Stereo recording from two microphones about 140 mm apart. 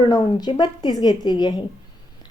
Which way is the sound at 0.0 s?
30° left (ahead or behind).